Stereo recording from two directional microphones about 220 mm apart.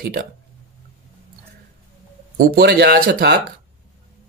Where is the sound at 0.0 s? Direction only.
45° right (ahead or behind).